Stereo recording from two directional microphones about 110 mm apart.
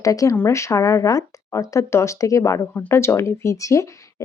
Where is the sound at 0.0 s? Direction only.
30° left (ahead or behind).